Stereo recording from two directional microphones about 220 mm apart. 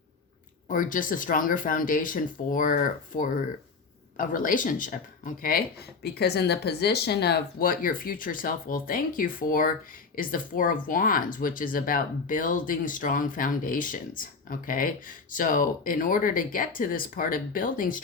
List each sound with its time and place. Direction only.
0.7 s speech: 35° left (ahead or behind)